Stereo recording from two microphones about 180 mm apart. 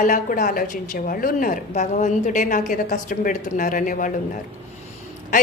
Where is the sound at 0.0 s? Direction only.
45° left (ahead or behind).